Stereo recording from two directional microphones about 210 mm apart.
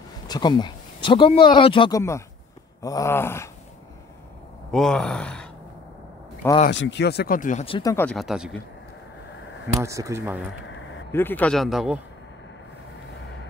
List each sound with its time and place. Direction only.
0.3 s speech: 20° left (ahead or behind)
2.8 s a sound: 15° left (ahead or behind)
4.6 s speech: centre (ahead or behind)
6.7 s speech: 60° left (ahead or behind); by 7.6 s 40° left (ahead or behind)
7.6 s speech: 25° left (ahead or behind)
7.9 s speech: 5° left (ahead or behind)
9.8 s speech: 15° right (ahead or behind)
11.1 s speech: 10° left (ahead or behind)